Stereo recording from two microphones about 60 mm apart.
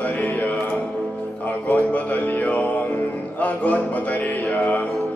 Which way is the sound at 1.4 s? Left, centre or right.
Left.